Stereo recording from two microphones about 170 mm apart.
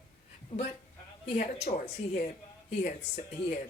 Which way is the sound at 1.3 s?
45° left (ahead or behind).